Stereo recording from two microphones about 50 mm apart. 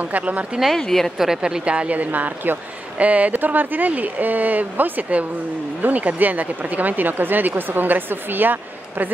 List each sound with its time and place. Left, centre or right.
0.0 s speech: right
0.7 s speech: centre
1.1 s speech: centre
1.4 s speech: right